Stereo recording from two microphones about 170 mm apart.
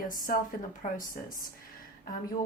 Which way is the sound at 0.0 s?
55° left (ahead or behind).